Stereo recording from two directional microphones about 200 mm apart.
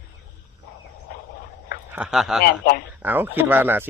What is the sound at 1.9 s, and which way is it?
Speech, 5° right (ahead or behind).